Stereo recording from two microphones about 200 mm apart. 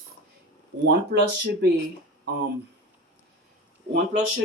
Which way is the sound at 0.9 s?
55° right (ahead or behind).